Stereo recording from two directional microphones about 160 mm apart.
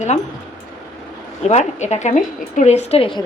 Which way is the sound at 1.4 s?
45° left (ahead or behind).